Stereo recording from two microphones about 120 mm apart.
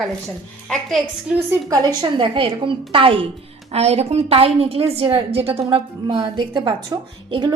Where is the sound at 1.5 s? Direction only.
30° right (ahead or behind); by 3.2 s 50° right (ahead or behind).